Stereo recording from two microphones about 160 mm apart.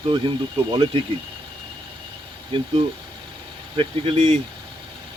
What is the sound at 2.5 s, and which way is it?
Speech, 35° right (ahead or behind).